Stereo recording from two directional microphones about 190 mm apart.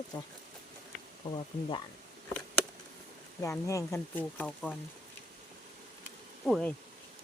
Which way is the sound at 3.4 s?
15° left (ahead or behind).